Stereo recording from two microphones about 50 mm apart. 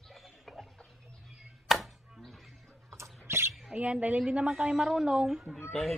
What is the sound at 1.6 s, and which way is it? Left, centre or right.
Chopping, centre.